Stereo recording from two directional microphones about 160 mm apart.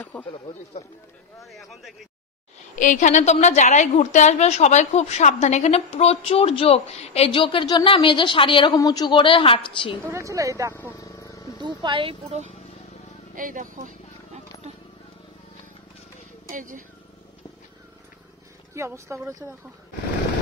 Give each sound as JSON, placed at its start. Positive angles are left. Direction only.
{"t": 0.0, "sound": "speech", "side_deg": 10}
{"t": 1.4, "sound": "speech", "side_deg": 0}
{"t": 2.7, "sound": "a woman's voice", "side_deg": 55}
{"t": 10.1, "sound": "speech", "side_deg": -20}
{"t": 11.0, "sound": "wild animals", "side_deg": 20}
{"t": 11.6, "sound": "speech", "side_deg": -30}
{"t": 13.3, "sound": "a sound", "side_deg": -55}
{"t": 16.4, "sound": "speech", "side_deg": -55}
{"t": 18.8, "sound": "speech", "side_deg": -20}